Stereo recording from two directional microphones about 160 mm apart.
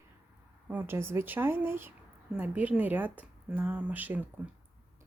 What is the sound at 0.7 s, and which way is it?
A woman's voice, 15° right (ahead or behind).